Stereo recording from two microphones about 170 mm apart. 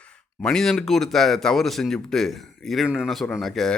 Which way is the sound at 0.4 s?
5° left (ahead or behind).